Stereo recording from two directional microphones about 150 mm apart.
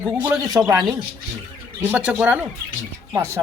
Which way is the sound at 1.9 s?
10° right (ahead or behind).